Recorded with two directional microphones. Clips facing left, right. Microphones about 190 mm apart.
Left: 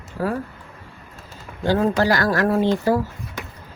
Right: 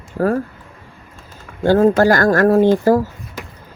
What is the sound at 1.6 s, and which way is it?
Speech, 50° right (ahead or behind).